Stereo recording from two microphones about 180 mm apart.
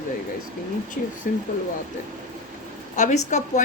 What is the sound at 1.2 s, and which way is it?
Speech, 55° left (ahead or behind).